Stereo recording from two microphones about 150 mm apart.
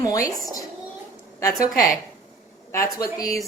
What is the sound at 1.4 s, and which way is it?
A woman's voice, 25° left (ahead or behind).